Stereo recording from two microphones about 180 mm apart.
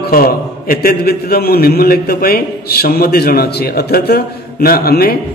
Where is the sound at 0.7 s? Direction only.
60° left (ahead or behind).